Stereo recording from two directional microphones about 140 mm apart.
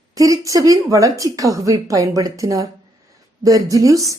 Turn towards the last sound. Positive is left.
turn(degrees=-25)  # may be behind; listen again after turning